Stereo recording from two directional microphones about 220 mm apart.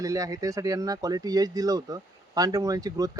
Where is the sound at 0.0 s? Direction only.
15° right (ahead or behind).